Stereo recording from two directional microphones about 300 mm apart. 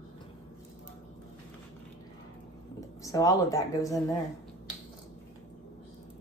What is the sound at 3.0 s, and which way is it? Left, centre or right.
Speech, centre.